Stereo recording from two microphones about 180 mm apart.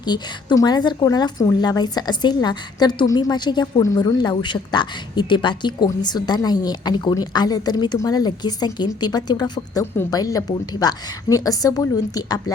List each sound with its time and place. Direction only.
0.0 s a woman's voice: 25° left (ahead or behind)